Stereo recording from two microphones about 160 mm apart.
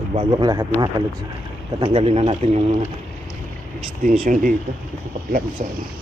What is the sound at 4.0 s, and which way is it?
Speech, 55° right (ahead or behind).